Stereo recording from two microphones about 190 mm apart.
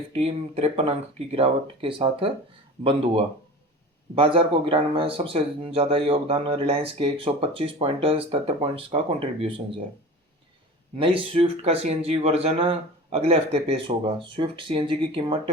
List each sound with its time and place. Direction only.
0.1 s speech: 35° right (ahead or behind)
10.9 s speech: 30° right (ahead or behind)